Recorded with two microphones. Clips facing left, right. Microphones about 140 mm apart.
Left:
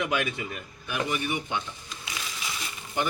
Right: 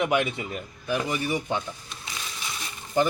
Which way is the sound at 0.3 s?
30° right (ahead or behind).